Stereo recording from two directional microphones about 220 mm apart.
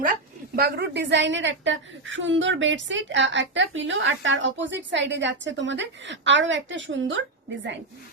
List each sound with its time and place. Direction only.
0.5 s a woman's voice: 45° right (ahead or behind)